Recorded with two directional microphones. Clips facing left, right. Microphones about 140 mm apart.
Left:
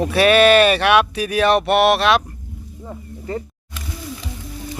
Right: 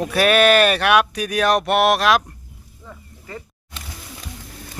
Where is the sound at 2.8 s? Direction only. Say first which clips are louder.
Left 9 dB; 35° left (ahead or behind).